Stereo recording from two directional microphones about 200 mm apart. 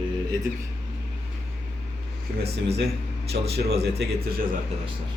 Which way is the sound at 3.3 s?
55° right (ahead or behind).